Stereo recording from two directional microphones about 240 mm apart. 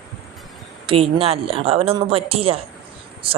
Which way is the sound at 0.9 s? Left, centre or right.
Right.